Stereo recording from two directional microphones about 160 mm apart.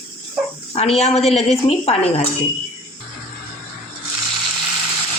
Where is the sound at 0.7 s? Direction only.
40° left (ahead or behind).